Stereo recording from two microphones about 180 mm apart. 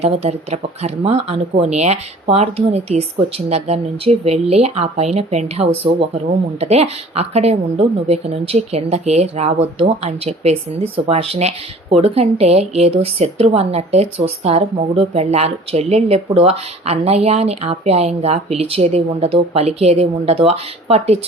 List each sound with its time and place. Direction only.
0.0 s speech: 35° right (ahead or behind)